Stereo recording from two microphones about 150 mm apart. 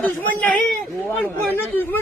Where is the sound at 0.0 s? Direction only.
10° left (ahead or behind).